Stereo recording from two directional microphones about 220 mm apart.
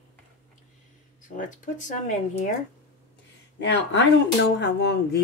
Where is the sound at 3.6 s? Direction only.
55° left (ahead or behind).